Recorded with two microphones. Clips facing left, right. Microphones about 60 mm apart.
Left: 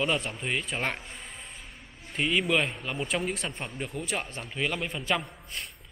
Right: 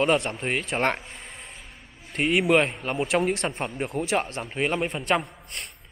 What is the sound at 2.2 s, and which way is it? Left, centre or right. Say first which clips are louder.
Speech: right 5 dB; right.